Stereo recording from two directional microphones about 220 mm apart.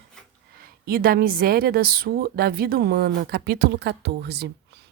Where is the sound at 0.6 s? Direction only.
40° right (ahead or behind).